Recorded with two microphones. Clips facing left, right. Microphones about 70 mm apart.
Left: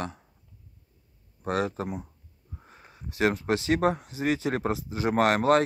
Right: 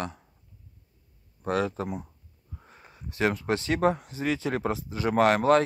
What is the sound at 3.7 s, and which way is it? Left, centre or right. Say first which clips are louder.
Speech: even; left.